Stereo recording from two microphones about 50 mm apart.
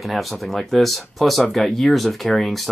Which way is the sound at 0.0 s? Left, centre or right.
Centre.